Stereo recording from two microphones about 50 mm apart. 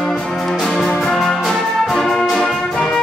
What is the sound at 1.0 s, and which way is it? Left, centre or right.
Brass instrument, centre.